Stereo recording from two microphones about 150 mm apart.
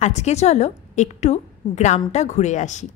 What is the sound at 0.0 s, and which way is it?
A woman's voice, 45° left (ahead or behind).